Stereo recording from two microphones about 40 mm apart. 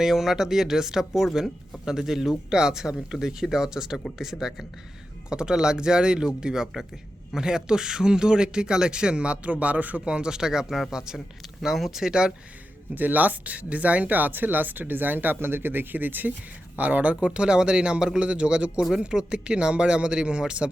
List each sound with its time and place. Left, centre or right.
0.0 s speech: centre
5.3 s speech: right
10.1 s speech: right
12.9 s speech: right